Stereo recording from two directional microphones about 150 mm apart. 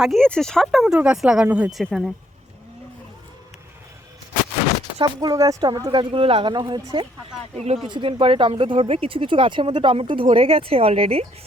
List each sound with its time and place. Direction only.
0.0 s speech: 5° left (ahead or behind)
4.9 s speech: 25° right (ahead or behind)